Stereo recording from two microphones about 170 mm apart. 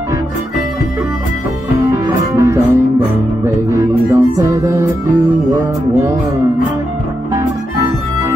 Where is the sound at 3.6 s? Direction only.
20° right (ahead or behind).